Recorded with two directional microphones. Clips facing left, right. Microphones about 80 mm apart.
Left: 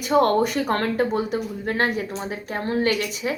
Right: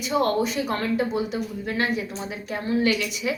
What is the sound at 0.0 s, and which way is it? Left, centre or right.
Speech, left.